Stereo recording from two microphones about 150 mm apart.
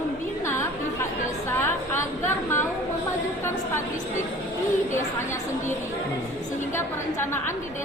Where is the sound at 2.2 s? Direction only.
15° left (ahead or behind).